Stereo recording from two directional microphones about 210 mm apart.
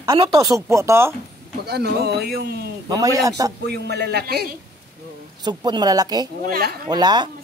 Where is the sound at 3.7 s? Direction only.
50° right (ahead or behind).